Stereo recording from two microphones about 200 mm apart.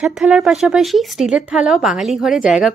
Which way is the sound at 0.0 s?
Centre (ahead or behind).